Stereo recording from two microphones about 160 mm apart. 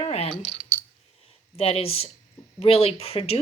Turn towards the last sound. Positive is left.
turn(degrees=40)  # may be behind; listen again after turning